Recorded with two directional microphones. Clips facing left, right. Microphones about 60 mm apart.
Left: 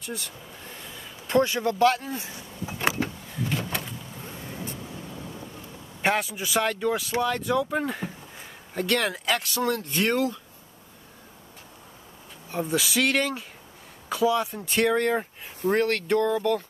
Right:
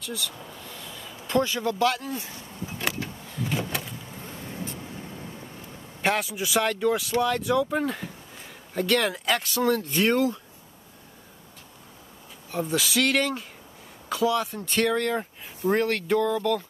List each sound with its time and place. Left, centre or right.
0.0 s speech: left
0.8 s a sound: centre
1.7 s speech: left
3.4 s door: centre
4.2 s vehicle: centre
6.0 s speech: centre
12.4 s speech: centre
15.7 s speech: centre